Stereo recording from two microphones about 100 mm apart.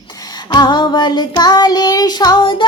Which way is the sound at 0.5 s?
50° left (ahead or behind).